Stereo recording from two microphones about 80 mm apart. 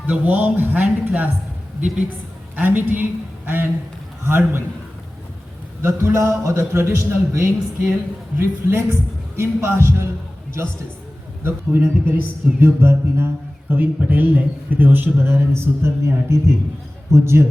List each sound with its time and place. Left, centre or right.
0.1 s speech: right
2.6 s speech: right
5.8 s a man's voice: right
11.4 s a man's voice: right